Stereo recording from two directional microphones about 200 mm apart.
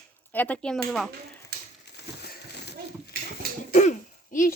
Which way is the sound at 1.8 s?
55° left (ahead or behind).